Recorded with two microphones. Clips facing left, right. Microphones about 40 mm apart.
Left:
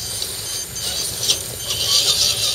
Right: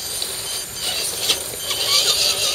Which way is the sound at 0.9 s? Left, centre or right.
Right.